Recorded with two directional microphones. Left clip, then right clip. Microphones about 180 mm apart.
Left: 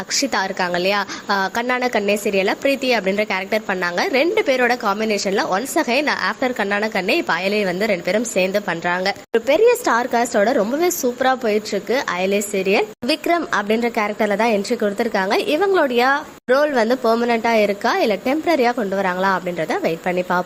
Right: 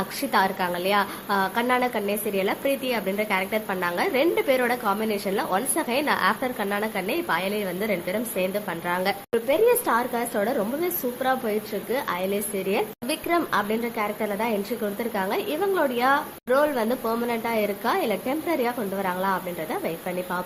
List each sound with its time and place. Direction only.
0.1 s a woman's voice: 25° left (ahead or behind)